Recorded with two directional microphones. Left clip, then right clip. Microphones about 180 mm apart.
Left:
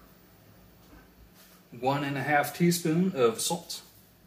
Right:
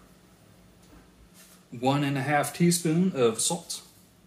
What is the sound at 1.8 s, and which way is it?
Speech, 35° right (ahead or behind).